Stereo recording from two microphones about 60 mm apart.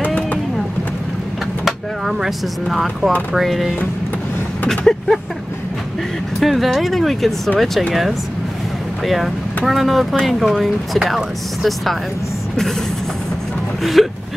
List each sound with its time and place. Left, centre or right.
0.0 s vehicle: left
1.6 s vehicle: centre
3.3 s speech: centre
6.4 s speech: centre
14.0 s speech: centre